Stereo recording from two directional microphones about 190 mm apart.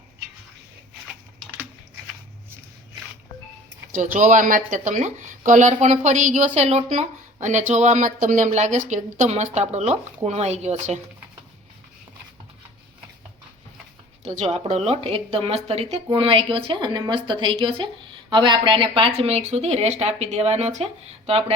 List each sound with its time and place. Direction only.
3.9 s a woman's voice: 40° right (ahead or behind)
14.3 s a woman's voice: 30° right (ahead or behind)